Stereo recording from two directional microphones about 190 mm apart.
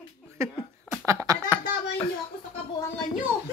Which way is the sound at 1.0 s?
15° right (ahead or behind).